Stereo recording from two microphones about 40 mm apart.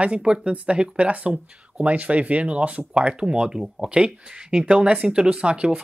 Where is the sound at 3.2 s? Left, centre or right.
Centre.